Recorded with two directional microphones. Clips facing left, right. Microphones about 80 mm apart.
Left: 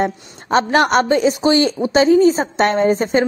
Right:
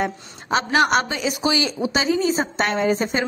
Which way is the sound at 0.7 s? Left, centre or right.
Centre.